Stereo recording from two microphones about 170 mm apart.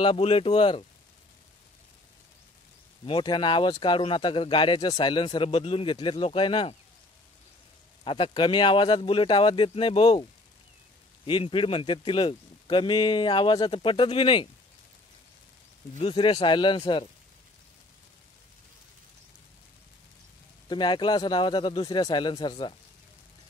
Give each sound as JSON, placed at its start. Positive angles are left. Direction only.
{"t": 0.0, "sound": "speech", "side_deg": 30}
{"t": 3.1, "sound": "speech", "side_deg": 30}
{"t": 8.0, "sound": "speech", "side_deg": 30}
{"t": 11.2, "sound": "speech", "side_deg": 30}
{"t": 16.0, "sound": "speech", "side_deg": 30}
{"t": 20.6, "sound": "speech", "side_deg": 25}